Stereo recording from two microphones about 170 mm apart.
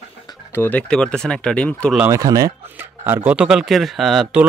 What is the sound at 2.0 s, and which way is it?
Speech, 20° right (ahead or behind).